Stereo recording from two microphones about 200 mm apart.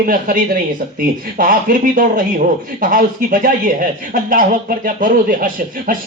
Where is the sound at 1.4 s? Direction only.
45° right (ahead or behind).